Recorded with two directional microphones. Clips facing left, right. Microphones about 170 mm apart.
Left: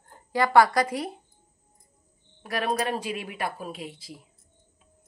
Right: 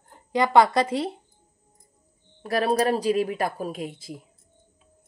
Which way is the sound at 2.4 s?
35° right (ahead or behind).